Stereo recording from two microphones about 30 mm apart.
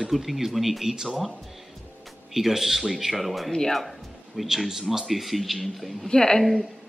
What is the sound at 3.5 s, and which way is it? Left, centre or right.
Speech, left.